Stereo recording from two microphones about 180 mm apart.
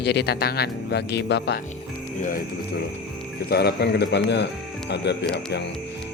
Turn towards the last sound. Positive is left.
turn(degrees=70)  # may be behind; listen again after turning